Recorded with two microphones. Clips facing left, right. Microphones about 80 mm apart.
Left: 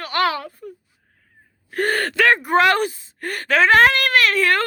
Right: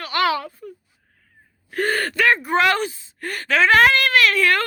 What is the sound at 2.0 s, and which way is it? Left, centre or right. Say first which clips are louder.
Speech: left 2 dB; left.